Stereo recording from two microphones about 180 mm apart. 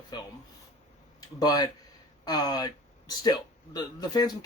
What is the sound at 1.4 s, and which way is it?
A man's voice, 20° left (ahead or behind).